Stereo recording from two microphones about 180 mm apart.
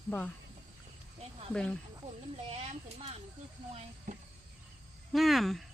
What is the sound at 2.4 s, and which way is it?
Speech, 35° right (ahead or behind).